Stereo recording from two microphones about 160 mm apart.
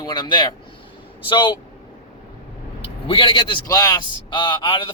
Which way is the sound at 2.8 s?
30° left (ahead or behind).